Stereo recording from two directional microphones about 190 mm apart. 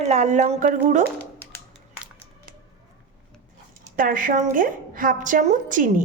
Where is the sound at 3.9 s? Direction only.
45° right (ahead or behind).